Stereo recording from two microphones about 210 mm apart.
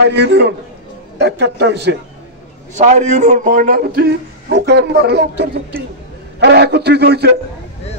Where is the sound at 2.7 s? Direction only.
35° right (ahead or behind).